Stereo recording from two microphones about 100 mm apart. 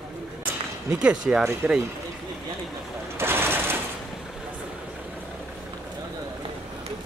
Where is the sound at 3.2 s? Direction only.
25° right (ahead or behind).